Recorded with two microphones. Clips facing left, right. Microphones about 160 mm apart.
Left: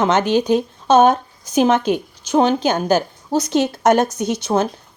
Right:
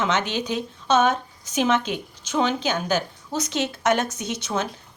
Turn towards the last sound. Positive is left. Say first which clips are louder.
# left 8 dB
turn(degrees=35)  # may be behind; listen again after turning